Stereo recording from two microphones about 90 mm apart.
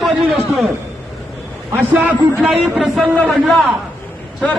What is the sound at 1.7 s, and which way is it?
Speech, 20° right (ahead or behind).